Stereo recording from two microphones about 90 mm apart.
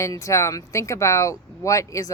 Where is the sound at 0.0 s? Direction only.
35° left (ahead or behind).